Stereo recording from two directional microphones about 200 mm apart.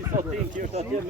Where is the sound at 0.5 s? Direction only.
35° right (ahead or behind).